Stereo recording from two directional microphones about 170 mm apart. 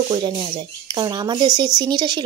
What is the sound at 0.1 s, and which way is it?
Speech, 30° right (ahead or behind).